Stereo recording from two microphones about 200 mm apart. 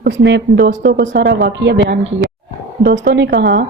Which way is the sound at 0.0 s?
65° right (ahead or behind).